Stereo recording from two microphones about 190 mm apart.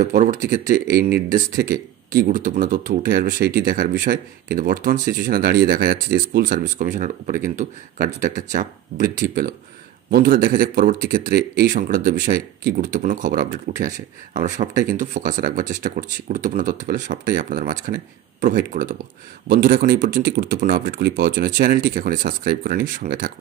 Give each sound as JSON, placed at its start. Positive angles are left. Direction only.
{"t": 0.0, "sound": "speech", "side_deg": -40}
{"t": 0.9, "sound": "speech", "side_deg": -55}